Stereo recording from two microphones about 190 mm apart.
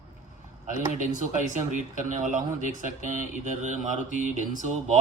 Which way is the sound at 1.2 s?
40° right (ahead or behind).